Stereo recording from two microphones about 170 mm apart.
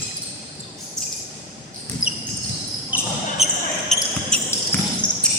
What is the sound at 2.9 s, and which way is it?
Basketball bounce, 10° right (ahead or behind).